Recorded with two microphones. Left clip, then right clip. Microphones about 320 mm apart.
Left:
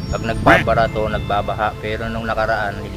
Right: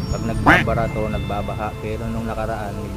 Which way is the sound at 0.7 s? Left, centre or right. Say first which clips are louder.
Left 6 dB; left.